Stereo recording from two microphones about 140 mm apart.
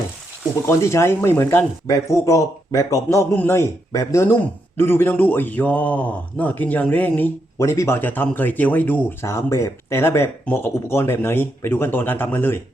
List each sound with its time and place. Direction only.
0.7 s speech: 20° left (ahead or behind)